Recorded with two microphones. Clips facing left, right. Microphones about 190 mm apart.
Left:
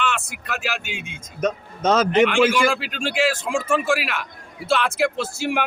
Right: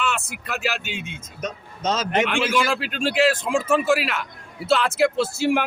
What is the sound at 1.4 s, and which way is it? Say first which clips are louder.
Speech: left 8 dB; 55° left (ahead or behind).